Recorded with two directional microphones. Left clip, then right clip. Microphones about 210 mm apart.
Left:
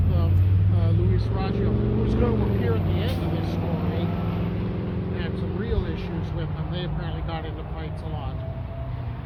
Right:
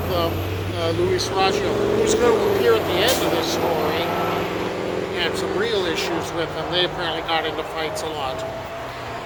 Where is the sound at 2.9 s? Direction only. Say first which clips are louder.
Right 12 dB; 5° right (ahead or behind).